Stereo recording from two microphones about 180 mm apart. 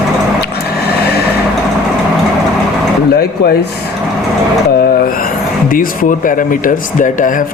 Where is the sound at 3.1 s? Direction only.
60° left (ahead or behind).